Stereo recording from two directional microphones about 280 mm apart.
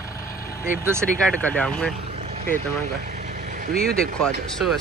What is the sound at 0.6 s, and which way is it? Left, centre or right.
Speech, centre.